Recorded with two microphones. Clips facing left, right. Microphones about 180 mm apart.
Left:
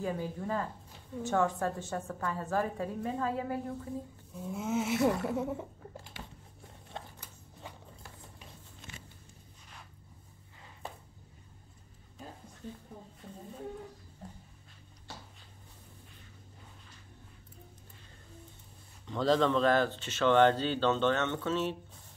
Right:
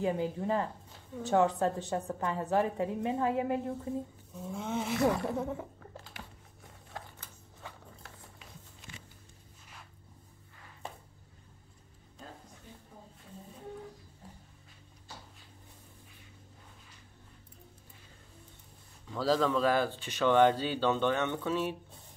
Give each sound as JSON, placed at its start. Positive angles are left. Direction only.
{"t": 0.0, "sound": "a woman's voice", "side_deg": -20}
{"t": 4.5, "sound": "speech", "side_deg": 5}
{"t": 6.9, "sound": "typewriter", "side_deg": 25}
{"t": 19.0, "sound": "speech", "side_deg": -5}